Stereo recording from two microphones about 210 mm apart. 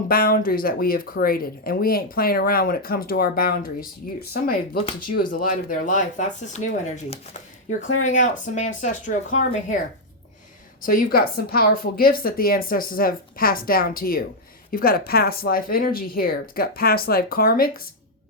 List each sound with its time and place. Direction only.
0.1 s speech: 45° left (ahead or behind)
7.8 s speech: 90° left
8.0 s speech: 35° left (ahead or behind)
10.8 s speech: 40° left (ahead or behind)